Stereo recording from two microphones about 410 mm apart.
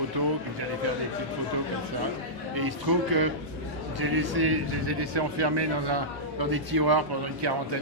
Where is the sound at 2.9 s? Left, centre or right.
Right.